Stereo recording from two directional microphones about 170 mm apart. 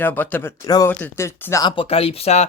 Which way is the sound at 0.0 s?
10° left (ahead or behind).